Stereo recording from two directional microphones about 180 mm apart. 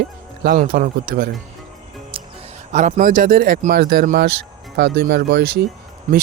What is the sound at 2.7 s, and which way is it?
Speech, 45° right (ahead or behind).